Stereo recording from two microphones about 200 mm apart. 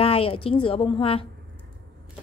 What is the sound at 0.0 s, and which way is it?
A woman's voice, 30° left (ahead or behind).